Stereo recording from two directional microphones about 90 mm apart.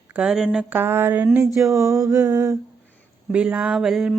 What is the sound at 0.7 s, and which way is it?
Mantra, 25° right (ahead or behind).